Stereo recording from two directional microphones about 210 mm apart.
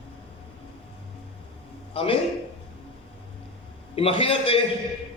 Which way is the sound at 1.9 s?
25° left (ahead or behind).